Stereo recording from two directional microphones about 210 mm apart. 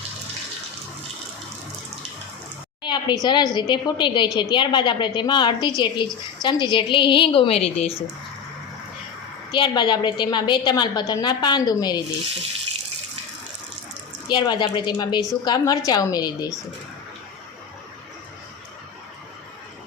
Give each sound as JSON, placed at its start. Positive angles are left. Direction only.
{"t": 2.8, "sound": "a woman's voice", "side_deg": 20}
{"t": 9.5, "sound": "a woman's voice", "side_deg": 20}
{"t": 14.3, "sound": "a woman's voice", "side_deg": 20}